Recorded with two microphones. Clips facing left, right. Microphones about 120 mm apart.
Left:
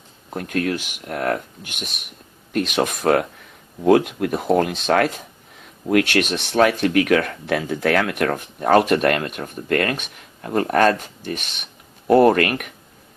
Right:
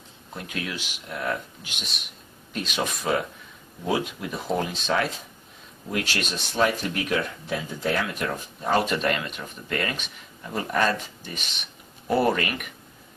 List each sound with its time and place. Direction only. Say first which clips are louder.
0.3 s speech: left 10 dB; 50° left (ahead or behind)